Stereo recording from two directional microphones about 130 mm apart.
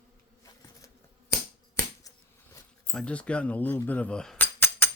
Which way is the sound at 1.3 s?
25° left (ahead or behind).